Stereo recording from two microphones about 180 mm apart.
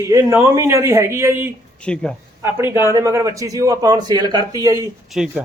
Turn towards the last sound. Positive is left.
turn(degrees=-5)  # may be behind; listen again after turning